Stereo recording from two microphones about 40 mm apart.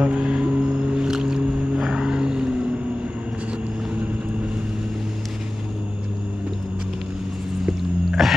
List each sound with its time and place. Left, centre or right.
0.0 s music: right
1.9 s vehicle: centre
7.6 s music: centre